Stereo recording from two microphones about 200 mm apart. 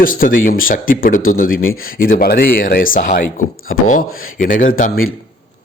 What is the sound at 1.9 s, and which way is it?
A man's voice, 45° left (ahead or behind).